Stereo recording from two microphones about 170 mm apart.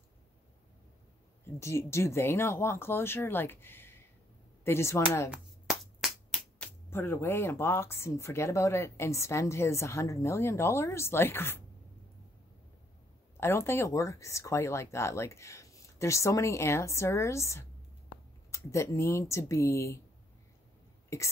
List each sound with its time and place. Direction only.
1.4 s speech: 15° left (ahead or behind)
5.3 s music: centre (ahead or behind)
6.9 s speech: 15° left (ahead or behind)
13.4 s speech: 15° left (ahead or behind)